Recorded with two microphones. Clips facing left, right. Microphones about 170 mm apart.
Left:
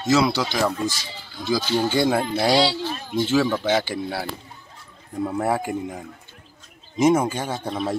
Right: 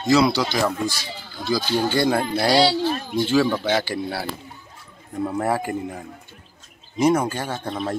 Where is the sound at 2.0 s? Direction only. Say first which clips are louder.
Even; centre (ahead or behind).